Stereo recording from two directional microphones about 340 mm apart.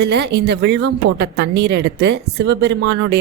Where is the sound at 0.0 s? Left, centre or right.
Right.